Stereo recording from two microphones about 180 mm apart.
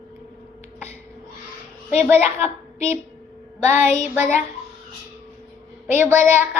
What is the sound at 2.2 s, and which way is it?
Speech, 35° left (ahead or behind).